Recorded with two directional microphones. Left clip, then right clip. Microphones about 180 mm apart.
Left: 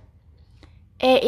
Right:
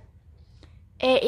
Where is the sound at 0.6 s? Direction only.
10° left (ahead or behind).